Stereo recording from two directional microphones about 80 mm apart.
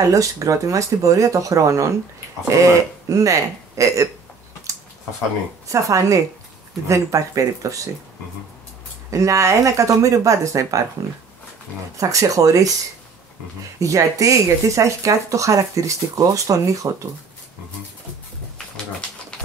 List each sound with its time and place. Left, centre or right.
0.1 s speech: right
5.7 s speech: right
9.1 s speech: right
12.0 s speech: right
13.7 s speech: right